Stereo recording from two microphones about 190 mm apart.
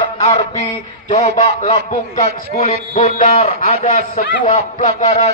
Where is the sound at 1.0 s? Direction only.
35° left (ahead or behind).